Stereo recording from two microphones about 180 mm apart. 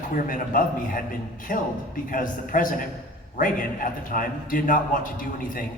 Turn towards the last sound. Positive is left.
turn(degrees=50)  # may be behind; listen again after turning